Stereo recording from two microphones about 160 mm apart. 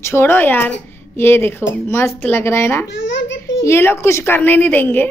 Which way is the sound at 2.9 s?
90° left.